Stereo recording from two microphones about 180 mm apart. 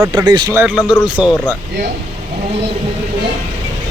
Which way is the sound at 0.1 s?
25° right (ahead or behind).